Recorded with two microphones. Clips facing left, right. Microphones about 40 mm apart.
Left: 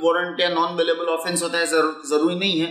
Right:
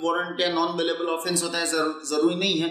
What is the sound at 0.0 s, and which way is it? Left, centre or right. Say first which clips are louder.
A man's voice: left 5 dB; left.